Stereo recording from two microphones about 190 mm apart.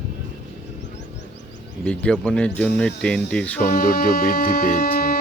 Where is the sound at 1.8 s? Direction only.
5° left (ahead or behind).